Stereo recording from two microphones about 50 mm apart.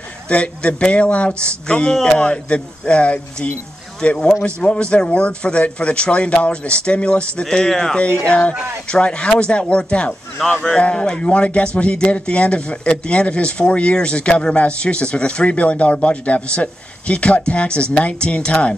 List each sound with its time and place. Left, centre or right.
0.3 s a man's voice: left